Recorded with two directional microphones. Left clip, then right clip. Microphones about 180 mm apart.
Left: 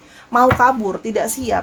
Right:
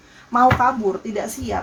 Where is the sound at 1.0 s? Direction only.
60° left (ahead or behind).